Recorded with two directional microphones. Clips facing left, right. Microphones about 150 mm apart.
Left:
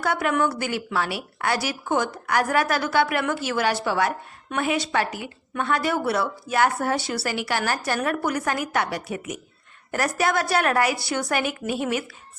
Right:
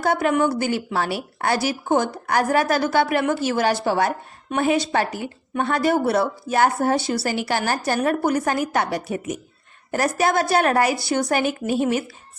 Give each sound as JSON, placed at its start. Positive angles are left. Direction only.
{"t": 0.0, "sound": "speech", "side_deg": -35}